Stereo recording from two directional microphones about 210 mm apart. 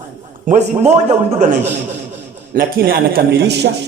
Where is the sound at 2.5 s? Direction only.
45° right (ahead or behind).